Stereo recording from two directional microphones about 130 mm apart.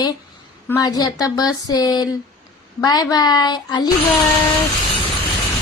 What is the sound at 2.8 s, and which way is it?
A woman's voice, 30° left (ahead or behind).